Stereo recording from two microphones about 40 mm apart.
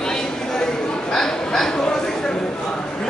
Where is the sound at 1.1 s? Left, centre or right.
Centre.